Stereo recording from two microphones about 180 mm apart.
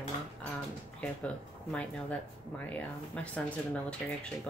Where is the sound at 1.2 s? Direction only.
5° left (ahead or behind).